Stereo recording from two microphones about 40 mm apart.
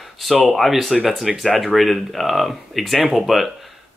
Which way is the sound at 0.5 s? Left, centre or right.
Centre.